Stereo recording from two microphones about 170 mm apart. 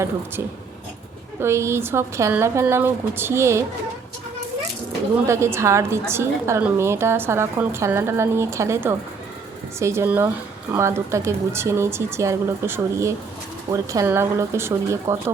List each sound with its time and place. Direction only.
1.4 s a woman's voice: 15° right (ahead or behind)
5.3 s a woman's voice: 15° right (ahead or behind)